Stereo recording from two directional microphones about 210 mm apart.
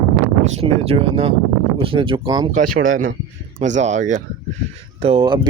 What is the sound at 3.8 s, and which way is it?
Speech, 35° right (ahead or behind).